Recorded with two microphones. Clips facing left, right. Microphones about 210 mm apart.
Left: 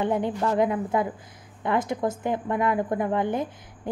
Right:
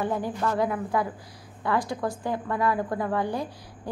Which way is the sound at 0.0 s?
20° left (ahead or behind).